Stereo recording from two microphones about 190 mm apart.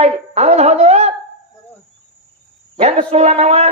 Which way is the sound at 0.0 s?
35° right (ahead or behind).